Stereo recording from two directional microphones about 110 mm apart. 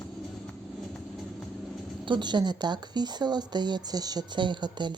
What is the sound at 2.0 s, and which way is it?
Speech, 45° right (ahead or behind).